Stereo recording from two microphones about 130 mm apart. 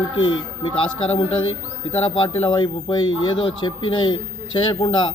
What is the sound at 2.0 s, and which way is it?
A man's voice, 40° left (ahead or behind).